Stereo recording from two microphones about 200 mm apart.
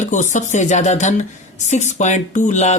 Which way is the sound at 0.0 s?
35° left (ahead or behind).